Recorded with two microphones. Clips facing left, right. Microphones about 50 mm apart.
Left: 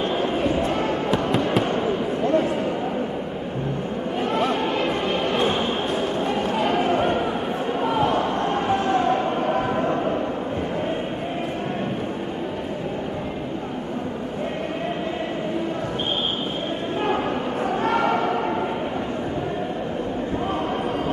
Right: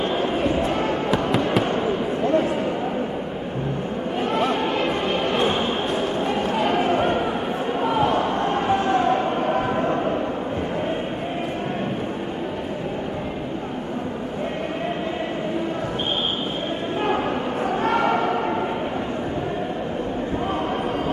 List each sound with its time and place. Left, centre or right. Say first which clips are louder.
0.0 s basketball bounce: even; centre
1.6 s fireworks: even; centre
2.2 s a sound: even; centre
4.2 s a sound: right 1 dB; centre
7.8 s basketball bounce: right 1 dB; centre
17.0 s basketball bounce: right 1 dB; centre